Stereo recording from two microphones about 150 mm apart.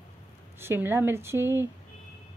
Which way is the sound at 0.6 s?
15° right (ahead or behind).